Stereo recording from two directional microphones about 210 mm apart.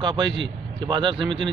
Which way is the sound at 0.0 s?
25° right (ahead or behind).